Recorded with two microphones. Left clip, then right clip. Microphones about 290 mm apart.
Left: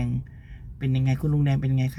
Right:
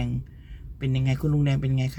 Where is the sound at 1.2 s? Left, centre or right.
Centre.